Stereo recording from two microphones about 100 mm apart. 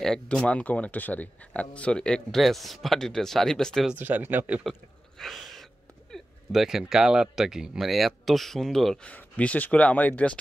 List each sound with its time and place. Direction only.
0.0 s speech: 5° left (ahead or behind)
3.9 s speech: 20° right (ahead or behind)
5.2 s sneeze: centre (ahead or behind)
6.1 s speech: centre (ahead or behind); by 10.3 s 15° left (ahead or behind)